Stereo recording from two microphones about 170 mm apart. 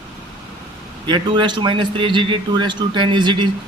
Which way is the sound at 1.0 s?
25° right (ahead or behind).